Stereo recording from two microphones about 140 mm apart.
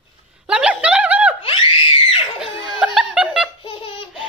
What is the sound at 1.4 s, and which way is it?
Screaming, 40° left (ahead or behind).